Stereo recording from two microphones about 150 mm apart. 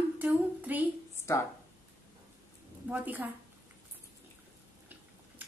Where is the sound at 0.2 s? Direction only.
10° right (ahead or behind).